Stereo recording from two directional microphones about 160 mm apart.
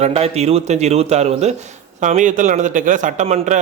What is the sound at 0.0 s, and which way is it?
A man's voice, 40° right (ahead or behind).